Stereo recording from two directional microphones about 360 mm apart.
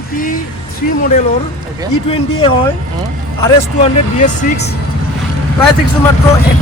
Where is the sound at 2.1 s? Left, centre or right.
Centre.